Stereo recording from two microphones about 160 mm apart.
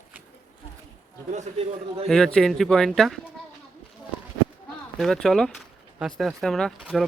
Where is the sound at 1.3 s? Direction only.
45° right (ahead or behind).